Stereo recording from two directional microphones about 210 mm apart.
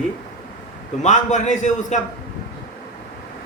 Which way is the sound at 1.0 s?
35° left (ahead or behind).